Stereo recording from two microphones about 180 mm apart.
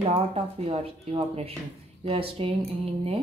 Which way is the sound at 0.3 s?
35° right (ahead or behind).